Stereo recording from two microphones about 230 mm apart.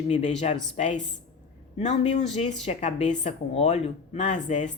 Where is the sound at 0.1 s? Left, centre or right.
Left.